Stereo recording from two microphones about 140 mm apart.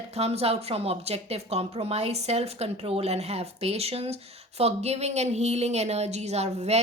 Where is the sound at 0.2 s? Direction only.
45° right (ahead or behind).